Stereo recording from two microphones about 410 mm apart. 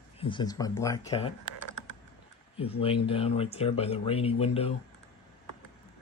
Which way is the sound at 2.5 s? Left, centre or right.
Centre.